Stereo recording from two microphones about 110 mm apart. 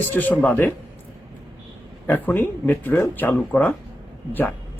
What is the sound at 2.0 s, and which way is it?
A man's voice, 15° left (ahead or behind).